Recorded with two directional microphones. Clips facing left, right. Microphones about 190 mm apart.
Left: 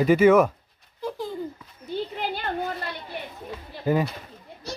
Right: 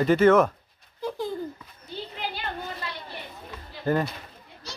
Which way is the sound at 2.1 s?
50° left (ahead or behind).